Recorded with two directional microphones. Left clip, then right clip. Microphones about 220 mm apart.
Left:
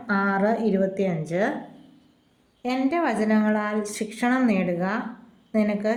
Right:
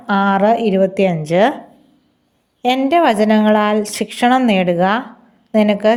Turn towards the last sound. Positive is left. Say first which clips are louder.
# right 11 dB
turn(degrees=-35)  # may be behind; listen again after turning